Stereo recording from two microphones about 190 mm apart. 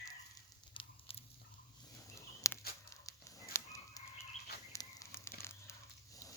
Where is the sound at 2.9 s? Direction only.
15° left (ahead or behind).